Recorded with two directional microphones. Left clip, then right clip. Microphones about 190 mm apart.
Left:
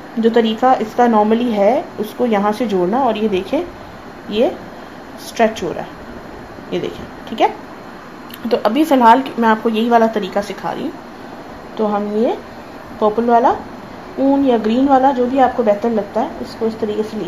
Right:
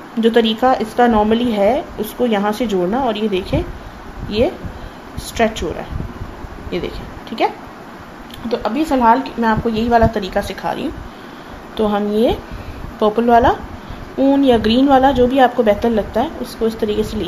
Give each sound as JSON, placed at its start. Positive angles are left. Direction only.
{"t": 0.2, "sound": "speech", "side_deg": -10}
{"t": 5.4, "sound": "speech", "side_deg": 0}
{"t": 6.7, "sound": "a woman's voice", "side_deg": 5}
{"t": 8.5, "sound": "a woman's voice", "side_deg": 25}
{"t": 11.7, "sound": "a woman's voice", "side_deg": -20}